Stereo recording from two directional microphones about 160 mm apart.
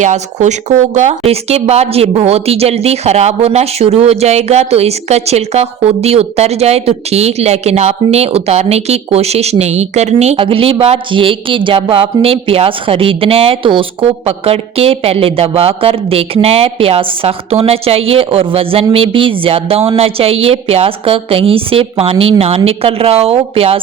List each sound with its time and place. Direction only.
0.0 s speech: 45° right (ahead or behind)